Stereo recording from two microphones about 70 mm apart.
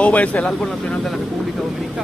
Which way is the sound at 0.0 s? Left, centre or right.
Left.